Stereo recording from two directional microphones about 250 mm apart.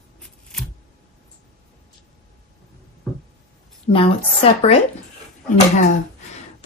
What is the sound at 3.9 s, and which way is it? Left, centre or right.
Speech, left.